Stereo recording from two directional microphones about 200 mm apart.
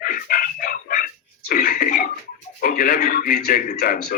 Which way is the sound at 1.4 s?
50° left (ahead or behind).